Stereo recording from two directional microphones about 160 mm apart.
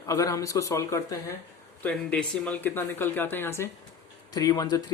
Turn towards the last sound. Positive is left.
turn(degrees=25)  # may be behind; listen again after turning